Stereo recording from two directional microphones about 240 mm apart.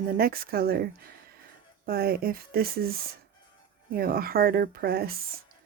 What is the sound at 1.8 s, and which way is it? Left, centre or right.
Speech, right.